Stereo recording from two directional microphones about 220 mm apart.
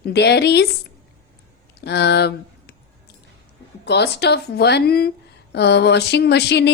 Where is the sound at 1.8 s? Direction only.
50° left (ahead or behind).